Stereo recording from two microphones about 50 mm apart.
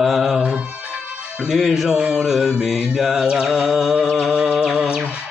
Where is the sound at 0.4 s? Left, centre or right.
Right.